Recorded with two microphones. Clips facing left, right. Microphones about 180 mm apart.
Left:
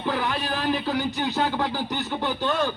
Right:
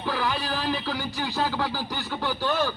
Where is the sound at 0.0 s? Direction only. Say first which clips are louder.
Left 2 dB; 20° left (ahead or behind).